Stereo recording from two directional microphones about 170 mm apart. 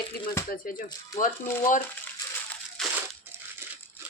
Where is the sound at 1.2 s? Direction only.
50° left (ahead or behind).